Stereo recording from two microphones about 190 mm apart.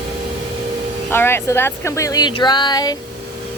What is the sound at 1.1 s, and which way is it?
Speech, 10° left (ahead or behind).